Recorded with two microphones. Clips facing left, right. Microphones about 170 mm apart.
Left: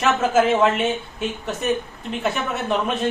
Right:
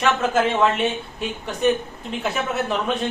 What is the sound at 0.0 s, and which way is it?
Speech, centre (ahead or behind).